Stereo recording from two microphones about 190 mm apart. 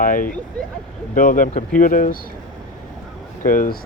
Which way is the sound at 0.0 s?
45° left (ahead or behind).